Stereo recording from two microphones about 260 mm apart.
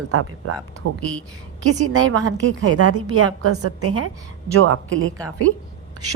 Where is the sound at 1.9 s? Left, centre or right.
Right.